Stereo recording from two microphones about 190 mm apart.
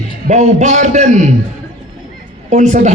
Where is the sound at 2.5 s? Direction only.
40° right (ahead or behind).